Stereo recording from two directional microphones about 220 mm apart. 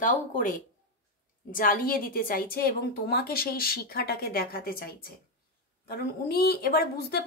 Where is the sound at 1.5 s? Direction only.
40° left (ahead or behind).